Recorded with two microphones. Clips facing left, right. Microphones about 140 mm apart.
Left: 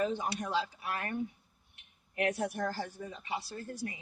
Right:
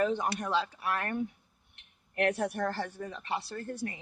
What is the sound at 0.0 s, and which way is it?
A woman's voice, 60° right (ahead or behind).